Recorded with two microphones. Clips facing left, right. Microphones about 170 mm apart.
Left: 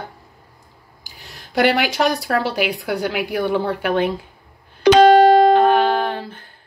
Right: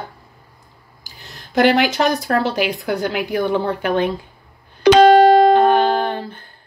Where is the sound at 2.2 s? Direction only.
10° left (ahead or behind).